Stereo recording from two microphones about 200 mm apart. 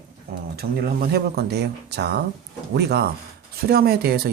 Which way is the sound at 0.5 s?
50° right (ahead or behind).